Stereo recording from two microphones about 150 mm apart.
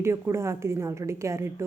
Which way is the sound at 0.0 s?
20° right (ahead or behind).